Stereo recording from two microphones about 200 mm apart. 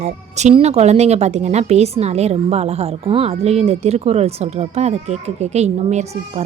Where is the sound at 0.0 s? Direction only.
35° right (ahead or behind).